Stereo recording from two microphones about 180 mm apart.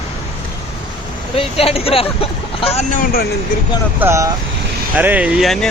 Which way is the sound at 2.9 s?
50° left (ahead or behind).